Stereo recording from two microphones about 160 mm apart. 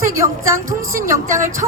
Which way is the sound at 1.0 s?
55° right (ahead or behind).